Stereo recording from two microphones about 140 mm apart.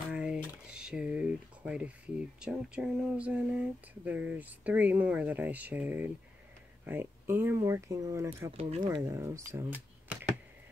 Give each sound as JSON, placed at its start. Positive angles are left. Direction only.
{"t": 0.1, "sound": "speech", "side_deg": -5}
{"t": 8.5, "sound": "speech", "side_deg": -45}
{"t": 8.8, "sound": "speech", "side_deg": -25}